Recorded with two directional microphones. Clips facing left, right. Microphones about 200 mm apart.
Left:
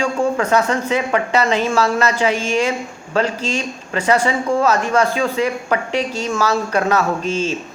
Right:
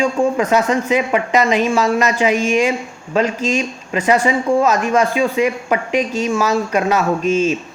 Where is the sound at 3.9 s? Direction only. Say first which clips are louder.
Right 2 dB; 15° right (ahead or behind).